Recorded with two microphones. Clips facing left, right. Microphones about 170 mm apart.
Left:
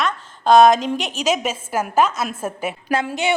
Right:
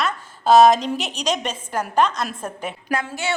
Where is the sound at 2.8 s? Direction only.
20° left (ahead or behind).